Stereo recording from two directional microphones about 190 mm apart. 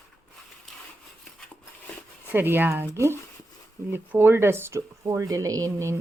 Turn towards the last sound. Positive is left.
turn(degrees=-15)  # may be behind; listen again after turning